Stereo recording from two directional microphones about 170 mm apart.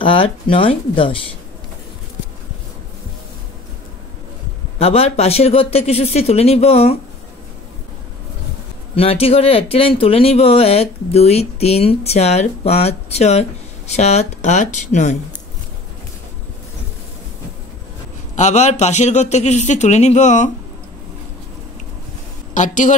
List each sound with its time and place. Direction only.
0.0 s speech: 30° left (ahead or behind)
4.7 s speech: 35° left (ahead or behind)
8.9 s speech: 35° left (ahead or behind)
18.3 s a man's voice: 45° left (ahead or behind)
22.5 s a woman's voice: 50° left (ahead or behind)